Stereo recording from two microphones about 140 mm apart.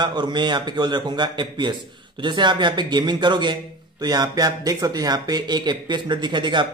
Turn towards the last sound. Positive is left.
turn(degrees=-35)  # may be behind; listen again after turning